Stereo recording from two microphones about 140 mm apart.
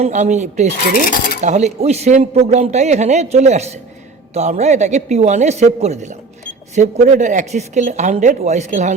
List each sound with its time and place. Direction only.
0.0 s a man's voice: 60° right (ahead or behind)